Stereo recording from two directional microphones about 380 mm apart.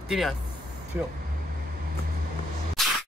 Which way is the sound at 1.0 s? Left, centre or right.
Centre.